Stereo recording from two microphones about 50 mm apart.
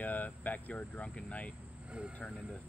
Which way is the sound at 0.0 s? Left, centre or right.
Left.